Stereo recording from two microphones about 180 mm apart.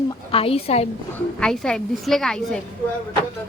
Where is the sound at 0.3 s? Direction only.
30° left (ahead or behind).